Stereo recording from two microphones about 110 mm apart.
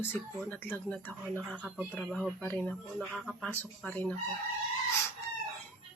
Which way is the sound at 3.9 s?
15° left (ahead or behind).